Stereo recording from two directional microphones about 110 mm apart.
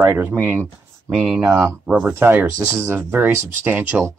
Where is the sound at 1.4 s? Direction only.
20° right (ahead or behind).